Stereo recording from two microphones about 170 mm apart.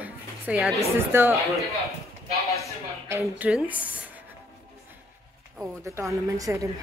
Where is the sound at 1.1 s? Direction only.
15° right (ahead or behind).